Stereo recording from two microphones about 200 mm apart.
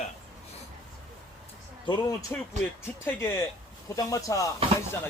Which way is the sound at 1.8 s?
20° left (ahead or behind).